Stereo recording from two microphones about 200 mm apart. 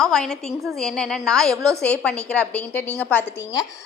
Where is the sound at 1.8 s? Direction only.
5° left (ahead or behind).